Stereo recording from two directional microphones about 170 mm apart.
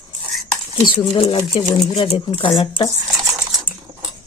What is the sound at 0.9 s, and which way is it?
Speech, 35° left (ahead or behind).